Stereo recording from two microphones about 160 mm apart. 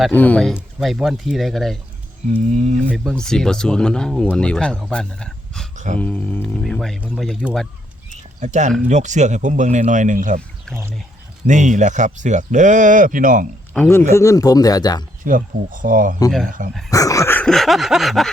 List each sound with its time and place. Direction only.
0.1 s speech: 10° left (ahead or behind)
0.5 s speech: 5° right (ahead or behind)
2.4 s speech: 45° right (ahead or behind)
2.9 s speech: 5° left (ahead or behind)
5.7 s a sound: 50° right (ahead or behind)
6.0 s speech: 10° left (ahead or behind)
8.1 s a sound: 50° right (ahead or behind)
8.9 s speech: 50° right (ahead or behind)
11.4 s speech: 50° right (ahead or behind)
13.7 s speech: 15° left (ahead or behind)
15.2 s speech: 55° right (ahead or behind)
16.9 s speech: 20° left (ahead or behind); by 18.3 s centre (ahead or behind)